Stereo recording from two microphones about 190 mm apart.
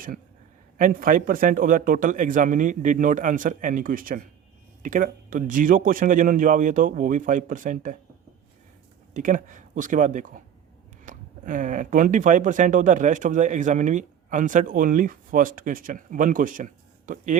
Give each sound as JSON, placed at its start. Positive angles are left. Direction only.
{"t": 0.8, "sound": "speech", "side_deg": -45}
{"t": 9.1, "sound": "speech", "side_deg": -45}